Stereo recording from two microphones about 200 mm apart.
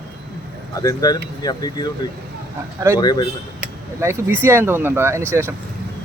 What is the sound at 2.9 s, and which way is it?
Speech, 20° left (ahead or behind).